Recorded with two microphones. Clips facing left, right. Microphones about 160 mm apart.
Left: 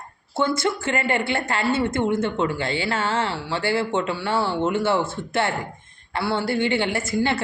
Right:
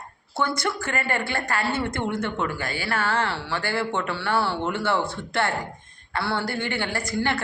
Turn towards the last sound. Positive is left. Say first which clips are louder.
# left 5 dB
turn(degrees=25)  # may be behind; listen again after turning